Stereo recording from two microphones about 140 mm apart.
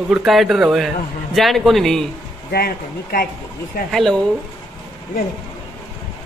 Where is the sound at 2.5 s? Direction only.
90° left.